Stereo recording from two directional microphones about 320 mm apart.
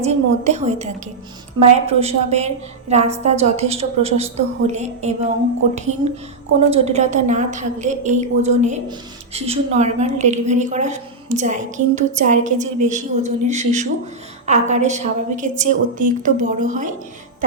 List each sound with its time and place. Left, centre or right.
0.0 s a woman's voice: right
6.7 s a woman's voice: right